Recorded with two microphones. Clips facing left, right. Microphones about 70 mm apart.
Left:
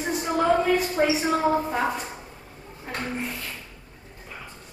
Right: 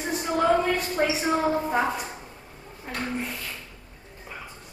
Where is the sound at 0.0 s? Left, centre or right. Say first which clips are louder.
Even; centre.